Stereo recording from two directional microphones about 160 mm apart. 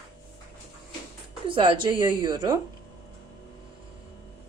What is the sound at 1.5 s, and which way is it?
A woman's voice, 30° right (ahead or behind).